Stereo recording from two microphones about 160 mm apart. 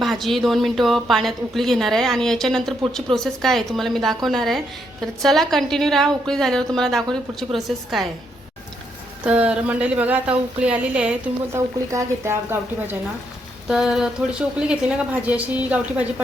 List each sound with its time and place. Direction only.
0.0 s a woman's voice: centre (ahead or behind)
9.2 s a woman's voice: 5° right (ahead or behind)
13.7 s a woman's voice: 5° right (ahead or behind)